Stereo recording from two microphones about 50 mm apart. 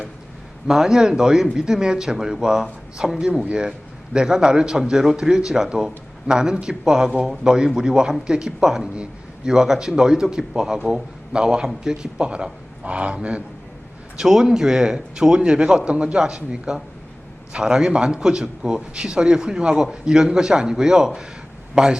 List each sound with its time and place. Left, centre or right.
0.7 s a man's voice: centre; by 13.1 s right
14.2 s a man's voice: centre